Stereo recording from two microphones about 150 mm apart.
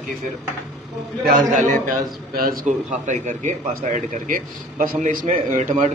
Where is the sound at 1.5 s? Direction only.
55° right (ahead or behind).